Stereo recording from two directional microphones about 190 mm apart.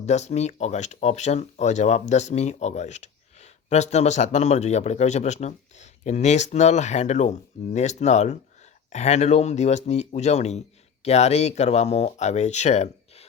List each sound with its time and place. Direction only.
0.0 s speech: 35° left (ahead or behind)